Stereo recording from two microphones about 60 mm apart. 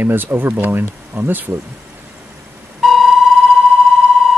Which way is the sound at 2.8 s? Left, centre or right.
Centre.